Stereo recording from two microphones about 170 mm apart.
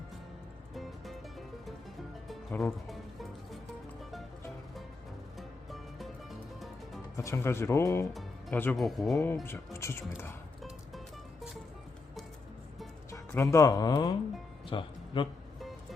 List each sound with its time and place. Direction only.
0.7 s music: centre (ahead or behind)
2.8 s music: centre (ahead or behind)
5.4 s music: centre (ahead or behind)
7.2 s speech: 15° left (ahead or behind)
8.1 s music: 5° left (ahead or behind)
8.8 s speech: centre (ahead or behind)
9.2 s speech: 15° left (ahead or behind)
13.1 s speech: 15° left (ahead or behind)
14.7 s music: 30° left (ahead or behind)